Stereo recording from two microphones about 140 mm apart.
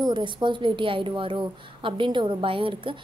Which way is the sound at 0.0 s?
35° right (ahead or behind).